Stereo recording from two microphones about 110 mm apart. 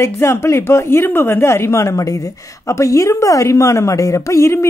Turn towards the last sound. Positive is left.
turn(degrees=25)  # may be behind; listen again after turning